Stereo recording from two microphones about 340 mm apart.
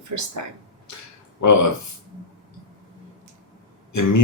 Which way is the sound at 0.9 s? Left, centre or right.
Left.